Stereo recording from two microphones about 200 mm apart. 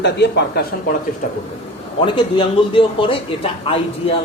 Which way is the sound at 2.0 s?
25° left (ahead or behind).